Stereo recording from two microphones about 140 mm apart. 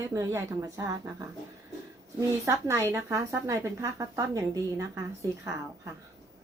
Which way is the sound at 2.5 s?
20° right (ahead or behind).